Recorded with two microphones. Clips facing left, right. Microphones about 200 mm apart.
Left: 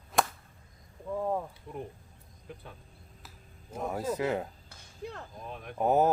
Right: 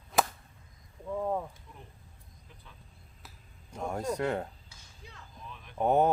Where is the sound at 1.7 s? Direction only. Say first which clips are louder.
Left 13 dB; 55° left (ahead or behind).